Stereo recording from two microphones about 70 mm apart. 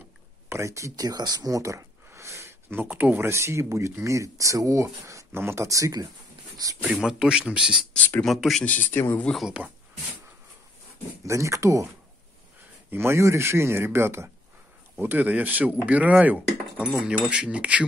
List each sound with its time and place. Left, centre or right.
0.5 s speech: right
1.0 s speech: right
1.6 s a sound: right
2.7 s a man's voice: right
3.2 s speech: right
5.3 s speech: right
7.0 s a man's voice: centre
8.3 s speech: centre
8.6 s speech: left
9.6 s speech: right
11.2 s speech: right
12.9 s a man's voice: right
15.0 s a man's voice: right